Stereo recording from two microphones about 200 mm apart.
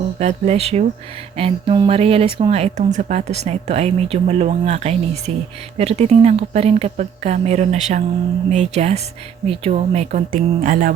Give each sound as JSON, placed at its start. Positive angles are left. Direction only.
{"t": 0.2, "sound": "speech", "side_deg": -35}